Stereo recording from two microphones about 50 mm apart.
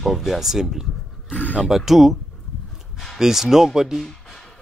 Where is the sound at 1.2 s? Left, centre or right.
Left.